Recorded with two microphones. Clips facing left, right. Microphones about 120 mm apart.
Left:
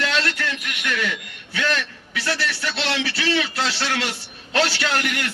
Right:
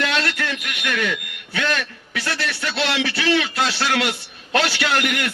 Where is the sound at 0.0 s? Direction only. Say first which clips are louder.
Right 1 dB; 50° right (ahead or behind).